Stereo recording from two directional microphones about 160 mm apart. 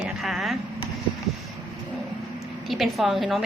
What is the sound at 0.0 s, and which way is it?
Vehicle, 5° right (ahead or behind).